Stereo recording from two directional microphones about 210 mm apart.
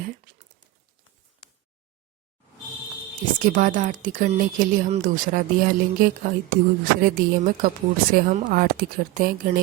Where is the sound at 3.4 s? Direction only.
40° right (ahead or behind).